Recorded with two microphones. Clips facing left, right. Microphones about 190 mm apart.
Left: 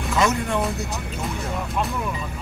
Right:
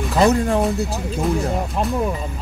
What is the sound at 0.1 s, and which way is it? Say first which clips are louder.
Speech: right 6 dB; 35° right (ahead or behind).